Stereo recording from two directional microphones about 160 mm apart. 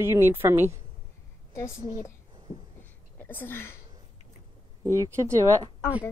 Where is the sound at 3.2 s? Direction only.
15° left (ahead or behind).